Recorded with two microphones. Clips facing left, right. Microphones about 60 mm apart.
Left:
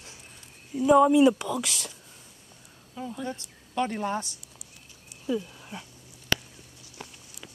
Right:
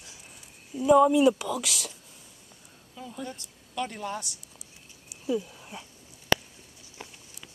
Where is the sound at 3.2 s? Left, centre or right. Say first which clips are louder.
Left 4 dB; left.